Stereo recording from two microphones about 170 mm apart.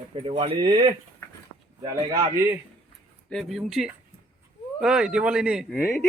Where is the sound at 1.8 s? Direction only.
20° right (ahead or behind).